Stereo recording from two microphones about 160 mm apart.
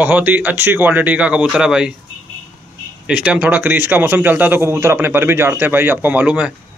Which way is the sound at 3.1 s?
10° right (ahead or behind).